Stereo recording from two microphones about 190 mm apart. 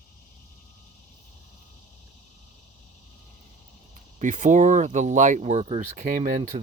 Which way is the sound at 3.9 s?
40° right (ahead or behind).